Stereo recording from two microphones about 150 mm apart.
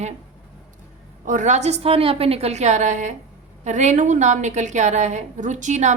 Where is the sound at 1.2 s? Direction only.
55° right (ahead or behind).